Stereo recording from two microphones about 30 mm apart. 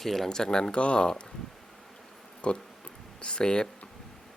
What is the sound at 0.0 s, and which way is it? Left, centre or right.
Speech, centre.